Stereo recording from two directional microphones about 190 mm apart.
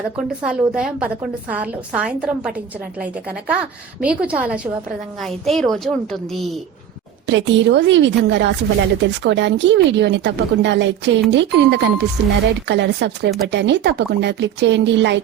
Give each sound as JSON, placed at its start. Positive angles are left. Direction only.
{"t": 0.2, "sound": "a woman's voice", "side_deg": -5}
{"t": 7.3, "sound": "speech", "side_deg": -70}